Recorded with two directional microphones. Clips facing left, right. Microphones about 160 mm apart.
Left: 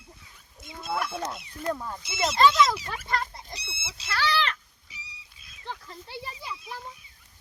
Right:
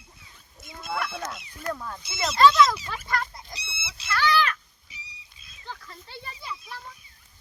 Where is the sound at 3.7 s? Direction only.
45° left (ahead or behind).